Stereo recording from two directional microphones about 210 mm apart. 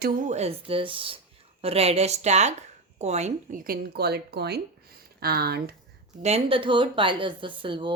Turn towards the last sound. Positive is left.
turn(degrees=-25)  # may be behind; listen again after turning